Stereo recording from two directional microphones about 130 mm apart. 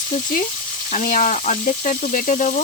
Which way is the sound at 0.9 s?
85° left.